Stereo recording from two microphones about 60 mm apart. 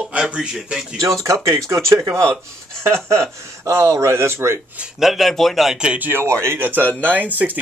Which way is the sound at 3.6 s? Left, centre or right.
Right.